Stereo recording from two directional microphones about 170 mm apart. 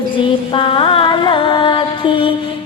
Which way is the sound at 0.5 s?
30° left (ahead or behind).